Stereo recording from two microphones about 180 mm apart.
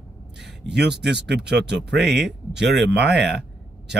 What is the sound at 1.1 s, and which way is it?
Speech, 70° right (ahead or behind).